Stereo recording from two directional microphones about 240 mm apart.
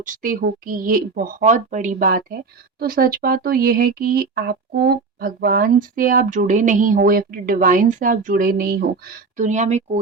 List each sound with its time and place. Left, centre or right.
0.0 s speech: right